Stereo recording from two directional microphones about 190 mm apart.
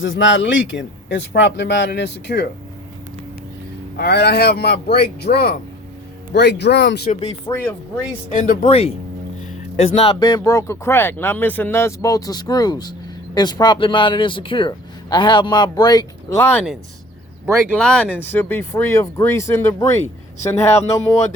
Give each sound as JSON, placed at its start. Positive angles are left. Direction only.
{"t": 0.0, "sound": "speech", "side_deg": 75}
{"t": 3.9, "sound": "speech", "side_deg": 55}
{"t": 7.1, "sound": "speech", "side_deg": 30}
{"t": 17.7, "sound": "speech", "side_deg": 5}